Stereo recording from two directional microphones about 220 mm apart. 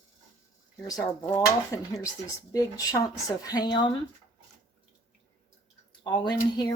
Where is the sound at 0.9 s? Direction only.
15° left (ahead or behind).